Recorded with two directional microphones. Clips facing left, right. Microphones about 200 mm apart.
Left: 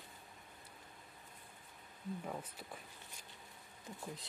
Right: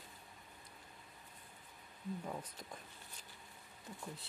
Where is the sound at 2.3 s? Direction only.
5° left (ahead or behind).